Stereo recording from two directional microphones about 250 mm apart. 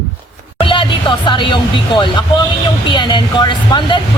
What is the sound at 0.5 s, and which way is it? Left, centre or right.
Speech, centre.